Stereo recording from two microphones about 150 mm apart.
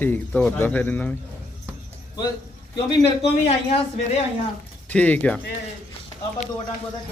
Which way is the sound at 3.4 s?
45° left (ahead or behind).